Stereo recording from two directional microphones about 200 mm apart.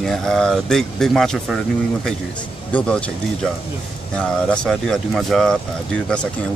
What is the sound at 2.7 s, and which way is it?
Speech, 5° left (ahead or behind).